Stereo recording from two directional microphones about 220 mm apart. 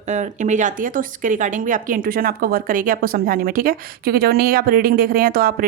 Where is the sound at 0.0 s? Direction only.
35° right (ahead or behind).